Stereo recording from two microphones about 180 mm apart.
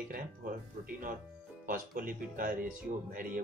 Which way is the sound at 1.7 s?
50° right (ahead or behind).